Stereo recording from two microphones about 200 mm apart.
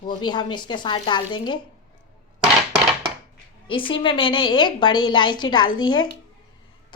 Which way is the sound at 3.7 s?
25° left (ahead or behind).